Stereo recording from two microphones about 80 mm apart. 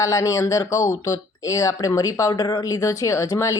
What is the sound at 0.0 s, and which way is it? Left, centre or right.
Speech, left.